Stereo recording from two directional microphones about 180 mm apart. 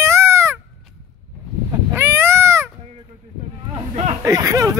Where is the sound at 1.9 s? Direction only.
15° right (ahead or behind).